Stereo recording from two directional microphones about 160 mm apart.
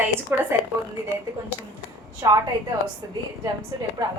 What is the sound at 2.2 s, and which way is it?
Speech, 25° right (ahead or behind).